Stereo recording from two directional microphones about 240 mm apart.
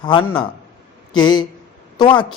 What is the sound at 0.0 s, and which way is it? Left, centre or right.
Speech, centre.